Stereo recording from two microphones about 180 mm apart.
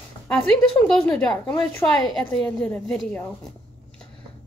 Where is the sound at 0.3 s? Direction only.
5° left (ahead or behind).